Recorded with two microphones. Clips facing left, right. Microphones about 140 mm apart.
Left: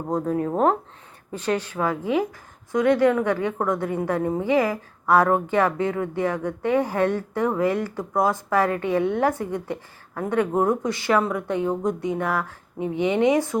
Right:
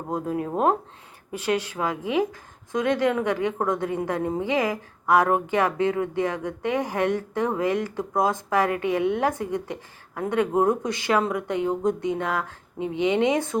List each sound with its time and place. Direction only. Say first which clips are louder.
0.4 s a woman's voice: even; 15° right (ahead or behind)